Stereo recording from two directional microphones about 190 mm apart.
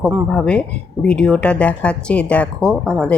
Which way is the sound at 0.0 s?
5° left (ahead or behind).